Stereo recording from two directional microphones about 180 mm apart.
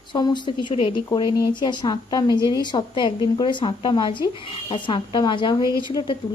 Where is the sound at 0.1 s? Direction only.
25° left (ahead or behind).